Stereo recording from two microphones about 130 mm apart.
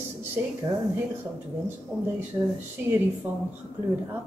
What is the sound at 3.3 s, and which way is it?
Speech, 15° right (ahead or behind).